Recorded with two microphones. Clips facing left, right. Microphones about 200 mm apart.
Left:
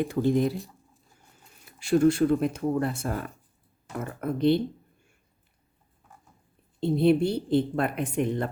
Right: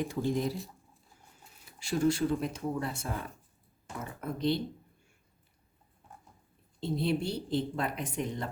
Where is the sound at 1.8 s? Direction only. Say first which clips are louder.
Left 7 dB; 55° left (ahead or behind).